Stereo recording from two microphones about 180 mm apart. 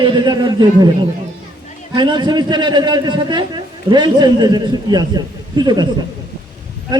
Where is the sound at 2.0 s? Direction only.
25° right (ahead or behind).